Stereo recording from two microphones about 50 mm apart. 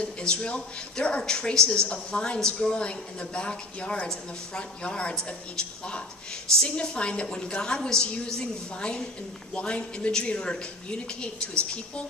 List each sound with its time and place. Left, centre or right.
0.0 s a woman's voice: centre